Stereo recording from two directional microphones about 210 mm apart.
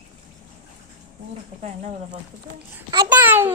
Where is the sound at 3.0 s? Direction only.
10° right (ahead or behind).